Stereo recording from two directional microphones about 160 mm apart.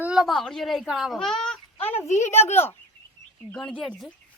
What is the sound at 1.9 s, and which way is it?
Speech, 15° left (ahead or behind).